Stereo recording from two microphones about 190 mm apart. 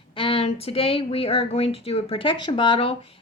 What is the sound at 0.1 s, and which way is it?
Speech, 30° left (ahead or behind).